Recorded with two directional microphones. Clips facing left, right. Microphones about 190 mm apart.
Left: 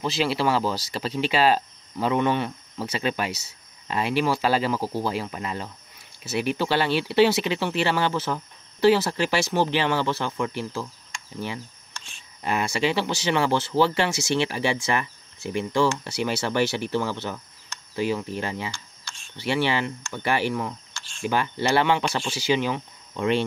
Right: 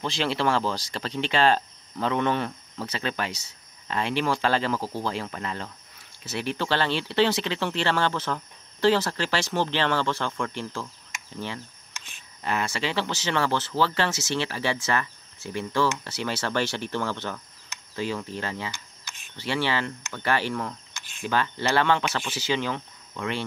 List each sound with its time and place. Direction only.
0.0 s speech: 5° left (ahead or behind)
11.1 s insect: 20° right (ahead or behind)
12.4 s speech: 15° left (ahead or behind)